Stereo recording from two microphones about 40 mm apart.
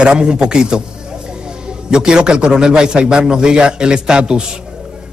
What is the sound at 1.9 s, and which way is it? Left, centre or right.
A man's voice, centre.